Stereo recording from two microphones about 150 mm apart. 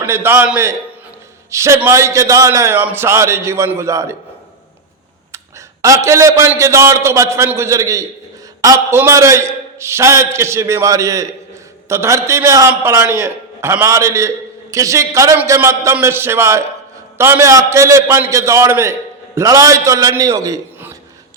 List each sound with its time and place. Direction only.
0.0 s a man's voice: 15° right (ahead or behind)
5.8 s a man's voice: 20° right (ahead or behind)